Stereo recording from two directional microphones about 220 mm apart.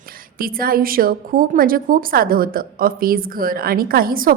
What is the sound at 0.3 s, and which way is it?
A woman's voice, 40° right (ahead or behind).